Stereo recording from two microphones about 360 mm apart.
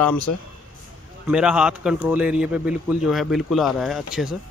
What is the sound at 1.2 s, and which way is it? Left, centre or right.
Speech, centre.